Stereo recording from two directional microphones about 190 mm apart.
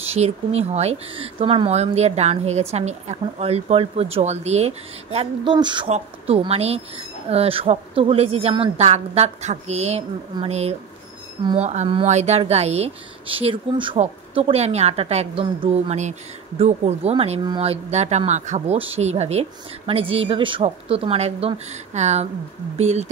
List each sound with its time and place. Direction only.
0.0 s speech: 35° right (ahead or behind)
5.9 s speech: 35° right (ahead or behind)